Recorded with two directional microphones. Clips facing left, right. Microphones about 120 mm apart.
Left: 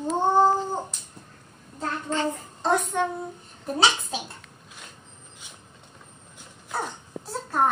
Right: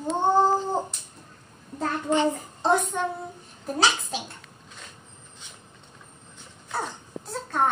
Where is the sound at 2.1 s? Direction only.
20° right (ahead or behind); by 4.2 s centre (ahead or behind).